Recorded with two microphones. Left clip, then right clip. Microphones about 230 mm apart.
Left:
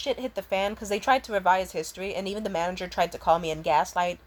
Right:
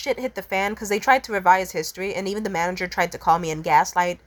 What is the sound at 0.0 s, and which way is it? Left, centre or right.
Speech, right.